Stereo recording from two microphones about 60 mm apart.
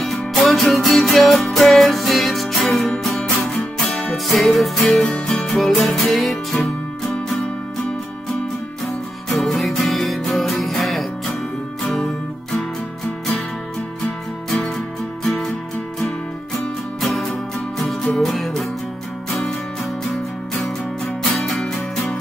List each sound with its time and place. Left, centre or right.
0.0 s music: centre
8.8 s music: centre
15.2 s music: centre
17.0 s music: centre
21.2 s music: centre